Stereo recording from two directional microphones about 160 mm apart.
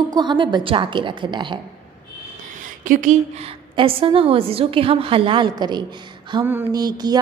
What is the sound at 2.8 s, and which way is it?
Speech, 55° right (ahead or behind).